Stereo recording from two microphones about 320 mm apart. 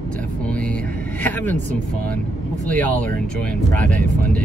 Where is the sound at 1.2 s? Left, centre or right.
Centre.